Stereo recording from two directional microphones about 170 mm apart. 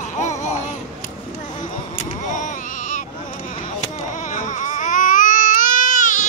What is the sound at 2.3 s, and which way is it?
Baby cry, 50° left (ahead or behind).